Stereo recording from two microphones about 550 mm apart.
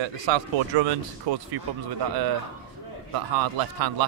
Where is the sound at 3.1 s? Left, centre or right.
Right.